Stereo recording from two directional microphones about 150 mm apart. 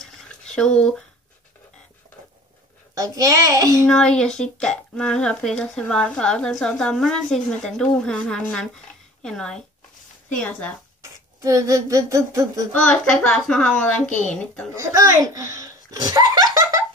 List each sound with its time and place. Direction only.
0.0 s a sound: 5° left (ahead or behind)
2.9 s humming: 20° right (ahead or behind)
3.9 s a woman's voice: 5° left (ahead or behind)
11.4 s humming: 20° right (ahead or behind)
12.7 s speech: 5° left (ahead or behind)
14.0 s a woman's voice: 55° left (ahead or behind)
14.3 s speech: 5° left (ahead or behind)
14.8 s humming: 20° right (ahead or behind)
15.5 s laughter: 25° right (ahead or behind)